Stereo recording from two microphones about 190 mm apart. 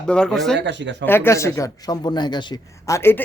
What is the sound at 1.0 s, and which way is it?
A man's voice, 10° left (ahead or behind).